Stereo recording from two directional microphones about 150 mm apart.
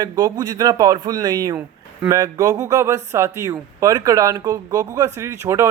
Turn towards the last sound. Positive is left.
turn(degrees=-20)  # may be behind; listen again after turning